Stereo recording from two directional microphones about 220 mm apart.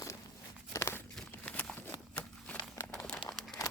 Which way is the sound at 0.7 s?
10° left (ahead or behind).